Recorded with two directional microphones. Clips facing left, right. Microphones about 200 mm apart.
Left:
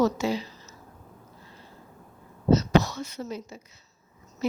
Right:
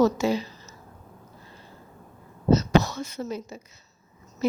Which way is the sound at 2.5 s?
45° right (ahead or behind).